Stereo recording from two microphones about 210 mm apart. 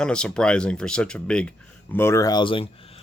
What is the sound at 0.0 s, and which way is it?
Speech, 5° left (ahead or behind).